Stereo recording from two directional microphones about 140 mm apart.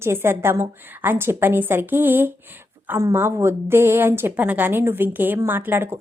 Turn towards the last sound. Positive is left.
turn(degrees=-15)  # may be behind; listen again after turning